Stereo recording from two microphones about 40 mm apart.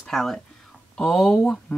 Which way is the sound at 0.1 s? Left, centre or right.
Centre.